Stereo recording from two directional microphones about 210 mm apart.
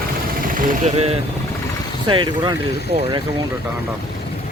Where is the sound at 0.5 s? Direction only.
30° right (ahead or behind).